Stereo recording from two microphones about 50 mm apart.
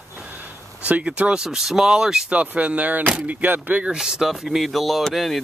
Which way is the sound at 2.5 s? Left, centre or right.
Right.